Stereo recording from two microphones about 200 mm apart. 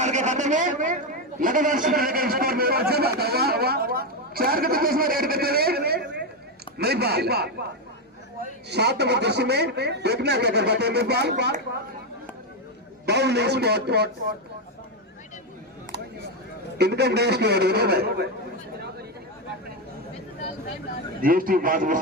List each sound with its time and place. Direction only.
0.0 s a sound: 35° right (ahead or behind)
1.4 s a man's voice: 40° right (ahead or behind)
8.7 s speech: 55° right (ahead or behind)
13.1 s speech: 55° right (ahead or behind)
16.7 s speech: 55° right (ahead or behind)
21.2 s a man's voice: 45° right (ahead or behind)